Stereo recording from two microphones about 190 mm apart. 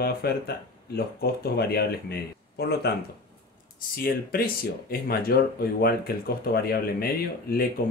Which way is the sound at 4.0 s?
50° left (ahead or behind).